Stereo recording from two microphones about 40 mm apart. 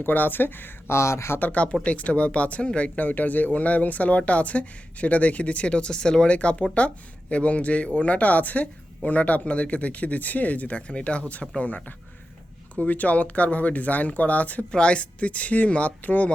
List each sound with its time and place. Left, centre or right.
0.0 s speech: left
1.4 s speech: left
1.8 s speech: left
2.9 s speech: left
14.7 s speech: left